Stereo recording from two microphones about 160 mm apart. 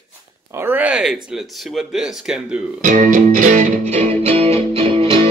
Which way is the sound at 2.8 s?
55° right (ahead or behind).